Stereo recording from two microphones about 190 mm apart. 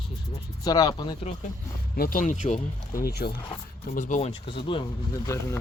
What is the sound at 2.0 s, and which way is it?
Speech, 45° left (ahead or behind).